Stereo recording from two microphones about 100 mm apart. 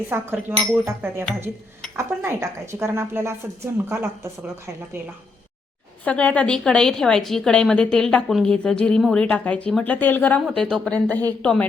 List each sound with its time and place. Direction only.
0.1 s a woman's voice: 25° right (ahead or behind)
6.1 s a woman's voice: 15° left (ahead or behind)
10.4 s a woman's voice: 5° left (ahead or behind)